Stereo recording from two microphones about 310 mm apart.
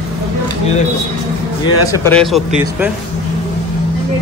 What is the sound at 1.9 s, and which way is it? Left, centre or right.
Speech, centre.